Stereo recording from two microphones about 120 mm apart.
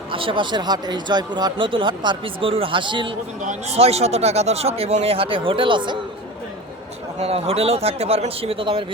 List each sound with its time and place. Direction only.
0.1 s speech: 45° right (ahead or behind)
3.4 s speech: 75° right (ahead or behind); by 6.0 s 40° right (ahead or behind)
7.2 s speech: 60° right (ahead or behind)